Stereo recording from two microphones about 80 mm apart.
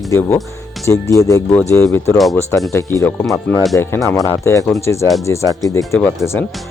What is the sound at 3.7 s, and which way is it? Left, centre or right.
Speech, left.